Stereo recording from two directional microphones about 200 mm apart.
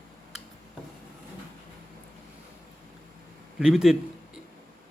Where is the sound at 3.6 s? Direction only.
Centre (ahead or behind).